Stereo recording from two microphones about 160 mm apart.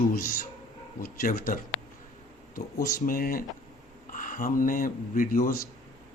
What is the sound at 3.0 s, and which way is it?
A man's voice, 60° left (ahead or behind).